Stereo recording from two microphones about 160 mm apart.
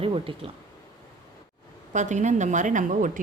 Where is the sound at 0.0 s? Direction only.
35° right (ahead or behind).